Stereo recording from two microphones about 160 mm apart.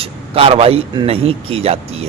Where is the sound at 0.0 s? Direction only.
35° right (ahead or behind).